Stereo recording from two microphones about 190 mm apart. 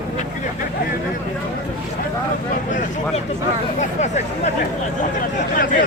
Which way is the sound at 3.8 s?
40° left (ahead or behind).